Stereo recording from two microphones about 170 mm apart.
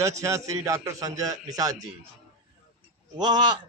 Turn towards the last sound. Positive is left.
turn(degrees=-25)  # may be behind; listen again after turning